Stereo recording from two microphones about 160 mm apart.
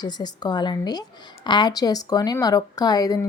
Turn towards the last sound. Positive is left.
turn(degrees=25)  # may be behind; listen again after turning